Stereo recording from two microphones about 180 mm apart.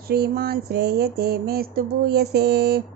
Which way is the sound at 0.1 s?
60° right (ahead or behind).